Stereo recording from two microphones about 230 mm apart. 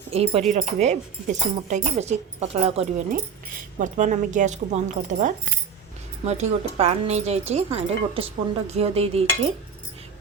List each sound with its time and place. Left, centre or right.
0.1 s speech: right